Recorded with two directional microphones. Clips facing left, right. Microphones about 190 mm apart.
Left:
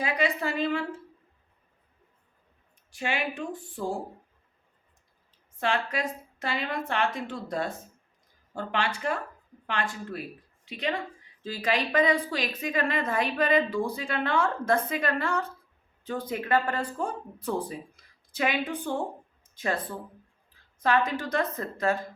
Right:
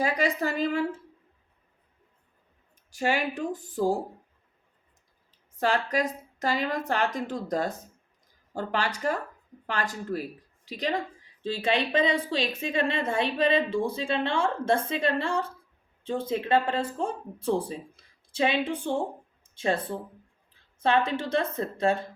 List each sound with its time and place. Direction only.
0.0 s speech: 45° right (ahead or behind)
2.9 s a woman's voice: 40° right (ahead or behind)
5.5 s a woman's voice: 40° right (ahead or behind)